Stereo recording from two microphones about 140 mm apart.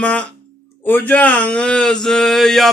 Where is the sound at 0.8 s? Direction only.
10° left (ahead or behind).